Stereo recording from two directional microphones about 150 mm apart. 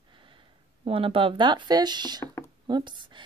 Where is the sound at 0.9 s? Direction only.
35° right (ahead or behind).